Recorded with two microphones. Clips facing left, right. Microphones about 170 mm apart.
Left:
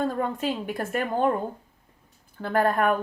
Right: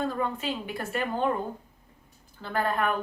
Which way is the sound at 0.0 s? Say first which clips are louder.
Left 3 dB; 50° left (ahead or behind).